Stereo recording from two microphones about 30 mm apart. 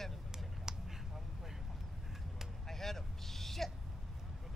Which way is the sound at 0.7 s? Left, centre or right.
Centre.